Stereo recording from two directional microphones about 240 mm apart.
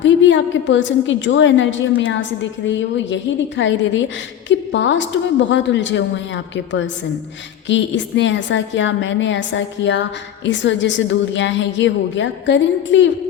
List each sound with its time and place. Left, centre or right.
0.0 s a woman's voice: left